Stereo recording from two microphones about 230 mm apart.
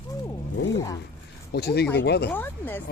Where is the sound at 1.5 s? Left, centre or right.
Left.